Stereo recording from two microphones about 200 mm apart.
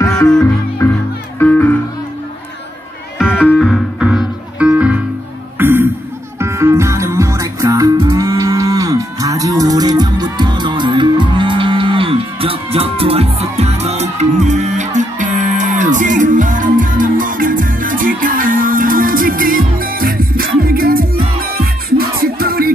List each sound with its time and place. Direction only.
0.4 s music: 10° left (ahead or behind)
3.4 s music: 5° left (ahead or behind); by 22.7 s 50° right (ahead or behind)